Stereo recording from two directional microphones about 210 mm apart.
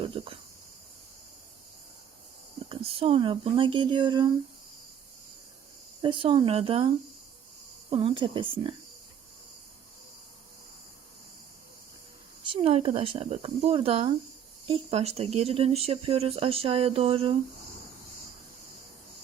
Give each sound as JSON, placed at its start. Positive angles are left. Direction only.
{"t": 0.0, "sound": "cricket", "side_deg": -25}
{"t": 2.6, "sound": "speech", "side_deg": -25}
{"t": 6.0, "sound": "speech", "side_deg": -25}
{"t": 12.5, "sound": "speech", "side_deg": -25}